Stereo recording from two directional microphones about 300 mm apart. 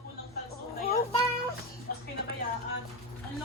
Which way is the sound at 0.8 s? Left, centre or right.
Left.